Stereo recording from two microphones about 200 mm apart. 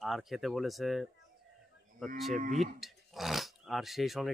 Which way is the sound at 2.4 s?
35° right (ahead or behind).